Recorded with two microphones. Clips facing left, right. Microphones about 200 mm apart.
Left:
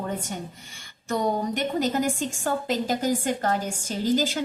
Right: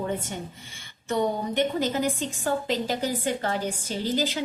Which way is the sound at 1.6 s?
45° left (ahead or behind).